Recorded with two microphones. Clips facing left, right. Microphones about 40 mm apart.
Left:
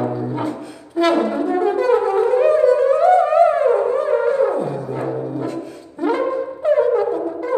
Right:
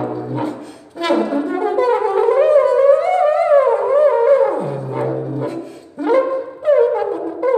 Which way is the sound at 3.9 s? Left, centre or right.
Right.